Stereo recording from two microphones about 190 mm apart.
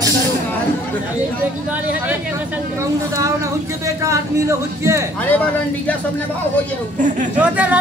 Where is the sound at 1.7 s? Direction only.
10° right (ahead or behind).